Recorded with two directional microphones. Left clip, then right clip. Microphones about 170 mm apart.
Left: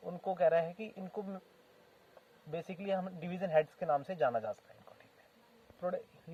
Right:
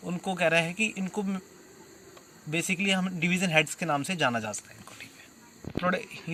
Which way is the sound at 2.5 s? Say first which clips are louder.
Right 9 dB; 45° left (ahead or behind).